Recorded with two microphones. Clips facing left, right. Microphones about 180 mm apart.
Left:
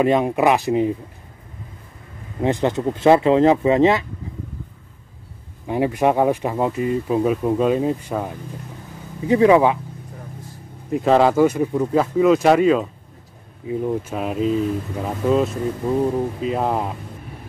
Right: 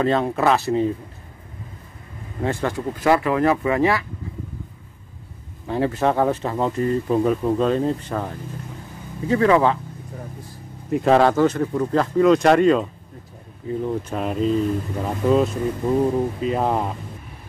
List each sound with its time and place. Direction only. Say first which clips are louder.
0.0 s speech: left 3 dB; 15° left (ahead or behind)
2.4 s speech: left 4 dB; 20° left (ahead or behind)
5.7 s speech: left 2 dB; 15° left (ahead or behind)
10.9 s speech: even; centre (ahead or behind)